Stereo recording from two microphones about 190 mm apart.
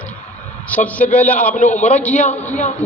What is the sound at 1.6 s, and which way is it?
Speech, 40° left (ahead or behind).